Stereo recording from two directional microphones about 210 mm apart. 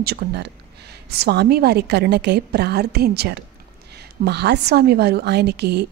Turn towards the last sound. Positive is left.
turn(degrees=-55)  # may be behind; listen again after turning